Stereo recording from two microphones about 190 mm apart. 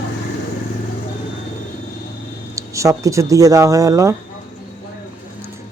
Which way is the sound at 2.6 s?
15° right (ahead or behind).